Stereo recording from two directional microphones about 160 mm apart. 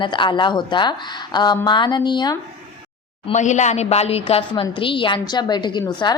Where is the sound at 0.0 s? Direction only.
30° left (ahead or behind).